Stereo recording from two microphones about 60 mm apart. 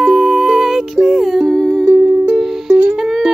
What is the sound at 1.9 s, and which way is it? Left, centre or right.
Music, right.